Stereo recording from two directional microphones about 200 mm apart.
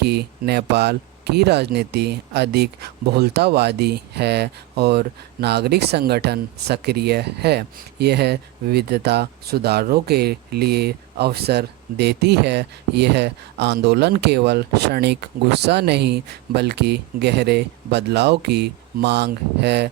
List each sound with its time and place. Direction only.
0.0 s speech: 55° right (ahead or behind)